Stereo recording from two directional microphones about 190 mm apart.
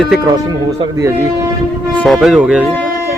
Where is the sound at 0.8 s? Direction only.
15° right (ahead or behind).